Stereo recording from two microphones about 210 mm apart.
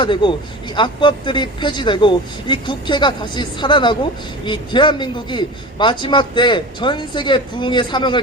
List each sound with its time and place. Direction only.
0.0 s a man's voice: 20° left (ahead or behind)